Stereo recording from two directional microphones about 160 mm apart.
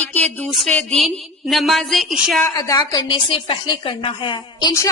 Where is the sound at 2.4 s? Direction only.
20° left (ahead or behind).